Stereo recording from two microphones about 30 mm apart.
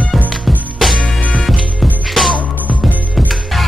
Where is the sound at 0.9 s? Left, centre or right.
Left.